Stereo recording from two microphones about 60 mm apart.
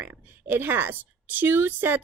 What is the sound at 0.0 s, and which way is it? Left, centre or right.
A woman's voice, right.